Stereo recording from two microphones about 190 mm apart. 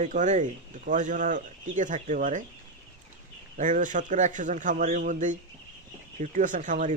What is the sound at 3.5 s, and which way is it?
Speech, 40° right (ahead or behind).